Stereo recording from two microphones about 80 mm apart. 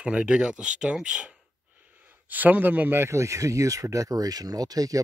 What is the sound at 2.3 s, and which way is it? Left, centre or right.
Speech, right.